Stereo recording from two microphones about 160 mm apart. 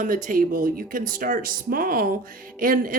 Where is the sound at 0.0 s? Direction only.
55° right (ahead or behind).